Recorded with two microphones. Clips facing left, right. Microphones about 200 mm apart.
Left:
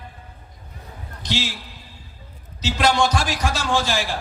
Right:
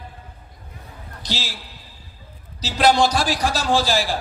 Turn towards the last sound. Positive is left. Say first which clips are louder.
# right 3 dB
turn(degrees=-35)  # may be behind; listen again after turning